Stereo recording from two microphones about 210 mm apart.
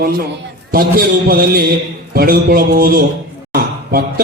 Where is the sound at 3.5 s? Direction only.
45° right (ahead or behind).